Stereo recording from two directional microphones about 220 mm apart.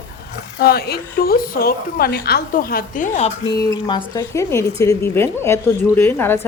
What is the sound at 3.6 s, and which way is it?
Speech, 20° left (ahead or behind).